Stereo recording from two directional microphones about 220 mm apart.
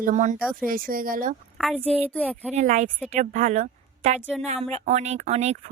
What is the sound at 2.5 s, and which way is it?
A woman's voice, 35° right (ahead or behind).